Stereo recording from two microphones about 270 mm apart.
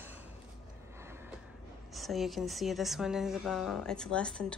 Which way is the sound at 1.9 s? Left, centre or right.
Centre.